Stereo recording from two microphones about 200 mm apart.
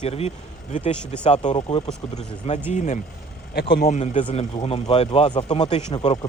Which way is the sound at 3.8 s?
35° left (ahead or behind).